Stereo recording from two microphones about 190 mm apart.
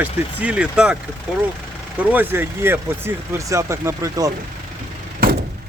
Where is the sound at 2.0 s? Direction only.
10° right (ahead or behind).